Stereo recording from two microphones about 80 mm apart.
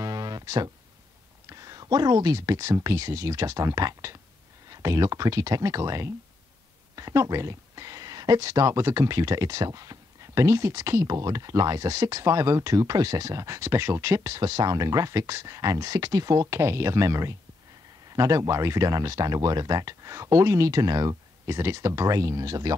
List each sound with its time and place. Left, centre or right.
0.0 s music: right
1.5 s speech: right
21.5 s speech: right